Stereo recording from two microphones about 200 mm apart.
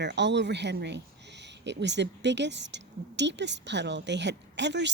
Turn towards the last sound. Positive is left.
turn(degrees=-60)  # may be behind; listen again after turning